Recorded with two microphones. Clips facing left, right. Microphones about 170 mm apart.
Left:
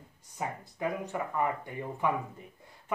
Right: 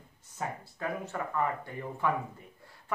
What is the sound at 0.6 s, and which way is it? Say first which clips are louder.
Speech: left 2 dB; 15° left (ahead or behind).